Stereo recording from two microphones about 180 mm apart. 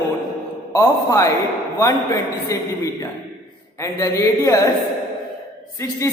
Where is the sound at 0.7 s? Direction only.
20° left (ahead or behind).